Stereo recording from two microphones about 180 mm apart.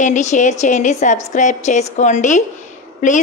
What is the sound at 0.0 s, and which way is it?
A woman's voice, 40° left (ahead or behind).